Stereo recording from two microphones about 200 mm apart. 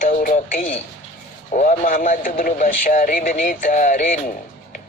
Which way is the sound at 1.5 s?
40° left (ahead or behind).